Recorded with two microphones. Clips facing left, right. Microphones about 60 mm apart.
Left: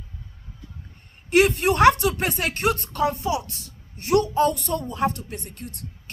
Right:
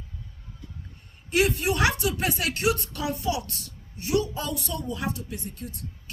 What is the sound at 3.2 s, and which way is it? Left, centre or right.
Speech, left.